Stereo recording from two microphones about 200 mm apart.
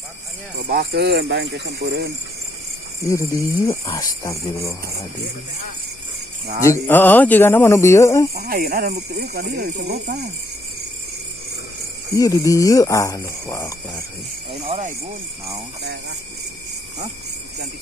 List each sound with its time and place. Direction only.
0.6 s speech: 55° right (ahead or behind)
3.1 s speech: 15° left (ahead or behind)
6.6 s speech: 10° left (ahead or behind)
8.4 s speech: 50° right (ahead or behind)
12.1 s speech: 15° left (ahead or behind)
14.5 s speech: 35° right (ahead or behind)
15.8 s speech: 60° right (ahead or behind)